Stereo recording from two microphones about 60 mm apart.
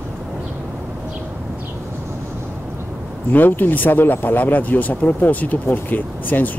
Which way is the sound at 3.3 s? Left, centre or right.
Left.